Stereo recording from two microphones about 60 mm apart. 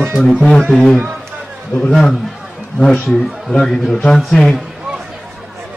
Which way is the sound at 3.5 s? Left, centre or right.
Centre.